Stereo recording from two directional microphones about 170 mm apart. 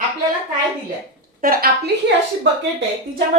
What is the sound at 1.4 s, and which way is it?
Speech, 60° right (ahead or behind).